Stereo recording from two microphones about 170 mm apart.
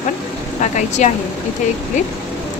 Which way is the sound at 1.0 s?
45° left (ahead or behind).